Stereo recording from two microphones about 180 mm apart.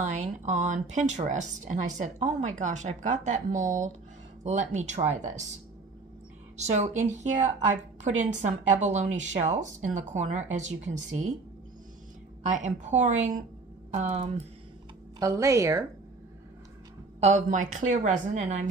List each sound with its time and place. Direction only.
0.2 s speech: 40° right (ahead or behind)
6.5 s speech: 40° right (ahead or behind)
13.0 s a woman's voice: 45° right (ahead or behind)
15.1 s speech: 20° right (ahead or behind)
17.2 s speech: 40° right (ahead or behind)